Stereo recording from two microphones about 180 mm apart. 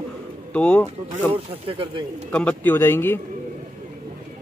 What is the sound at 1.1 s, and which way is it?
Speech, 30° right (ahead or behind).